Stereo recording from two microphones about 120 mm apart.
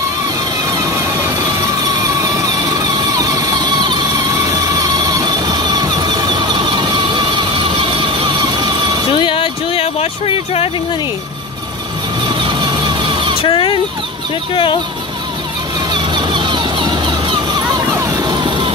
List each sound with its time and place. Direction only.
1.2 s vehicle: 30° right (ahead or behind)
9.2 s a sound: 45° left (ahead or behind)
12.3 s vehicle: 40° right (ahead or behind)
13.4 s vehicle: 45° left (ahead or behind)
14.5 s speech: 45° left (ahead or behind)
15.9 s vehicle: 40° right (ahead or behind)